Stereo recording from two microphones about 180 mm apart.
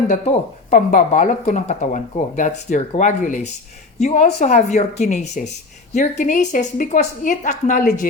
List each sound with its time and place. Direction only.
0.1 s a woman's voice: 45° left (ahead or behind)